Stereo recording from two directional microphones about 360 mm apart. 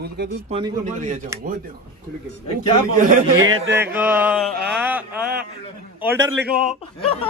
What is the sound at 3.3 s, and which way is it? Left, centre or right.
Speech, right.